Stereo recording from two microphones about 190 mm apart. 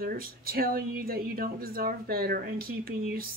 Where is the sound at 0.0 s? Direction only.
50° right (ahead or behind).